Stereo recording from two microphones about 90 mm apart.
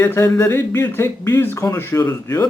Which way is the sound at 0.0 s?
25° left (ahead or behind).